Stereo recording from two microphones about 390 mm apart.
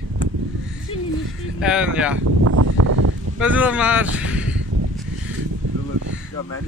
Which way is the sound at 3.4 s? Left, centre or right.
Centre.